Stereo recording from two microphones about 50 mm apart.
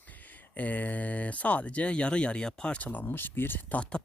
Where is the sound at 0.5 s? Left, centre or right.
Left; by 2.7 s centre.